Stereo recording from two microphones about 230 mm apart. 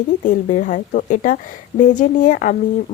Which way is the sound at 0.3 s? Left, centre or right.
Left.